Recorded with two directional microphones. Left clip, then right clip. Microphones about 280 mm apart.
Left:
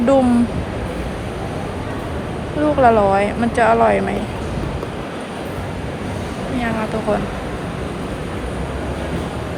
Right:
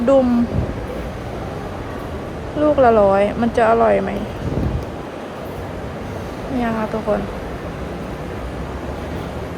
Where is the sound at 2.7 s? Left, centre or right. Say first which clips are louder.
Even; centre.